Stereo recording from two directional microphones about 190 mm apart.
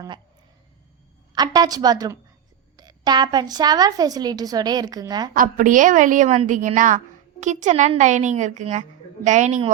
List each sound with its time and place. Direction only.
1.4 s a woman's voice: 20° right (ahead or behind)
5.3 s a woman's voice: 45° right (ahead or behind)